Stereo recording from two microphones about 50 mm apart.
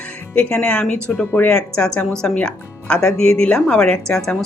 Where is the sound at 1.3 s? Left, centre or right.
Left.